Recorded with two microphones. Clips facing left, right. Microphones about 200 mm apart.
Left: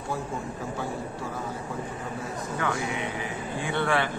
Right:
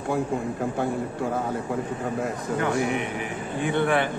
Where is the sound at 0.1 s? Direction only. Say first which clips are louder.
Right 7 dB; 55° right (ahead or behind).